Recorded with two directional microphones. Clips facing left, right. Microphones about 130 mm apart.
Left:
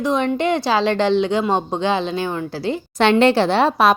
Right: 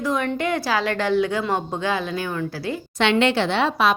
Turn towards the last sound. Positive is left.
turn(degrees=40)  # may be behind; listen again after turning